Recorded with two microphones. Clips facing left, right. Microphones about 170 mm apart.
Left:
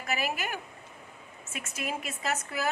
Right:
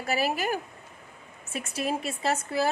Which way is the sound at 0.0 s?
35° right (ahead or behind).